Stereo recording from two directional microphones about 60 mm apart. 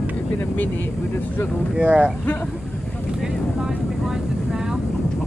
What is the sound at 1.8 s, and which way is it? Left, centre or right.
Speech, right.